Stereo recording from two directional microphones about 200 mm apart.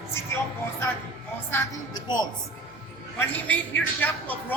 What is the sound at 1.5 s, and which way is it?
Speech, 20° left (ahead or behind).